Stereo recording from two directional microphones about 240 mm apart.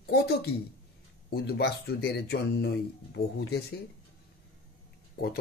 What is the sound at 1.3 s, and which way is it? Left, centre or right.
Speech, left.